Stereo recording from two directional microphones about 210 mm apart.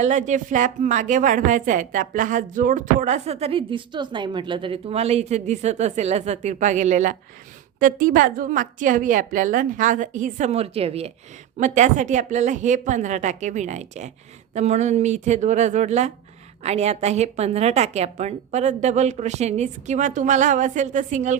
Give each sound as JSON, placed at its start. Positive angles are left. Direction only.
{"t": 0.0, "sound": "a woman's voice", "side_deg": -35}